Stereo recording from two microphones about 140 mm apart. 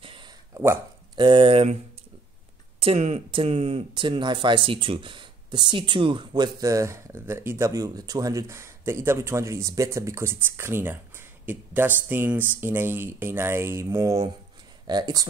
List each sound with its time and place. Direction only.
0.0 s a sound: 35° right (ahead or behind)
1.1 s speech: 35° right (ahead or behind)
2.8 s speech: 45° right (ahead or behind); by 15.2 s 30° right (ahead or behind)